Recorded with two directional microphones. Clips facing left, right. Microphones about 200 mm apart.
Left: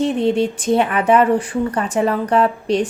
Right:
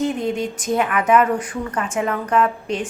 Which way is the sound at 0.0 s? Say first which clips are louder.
Left 5 dB; 30° left (ahead or behind).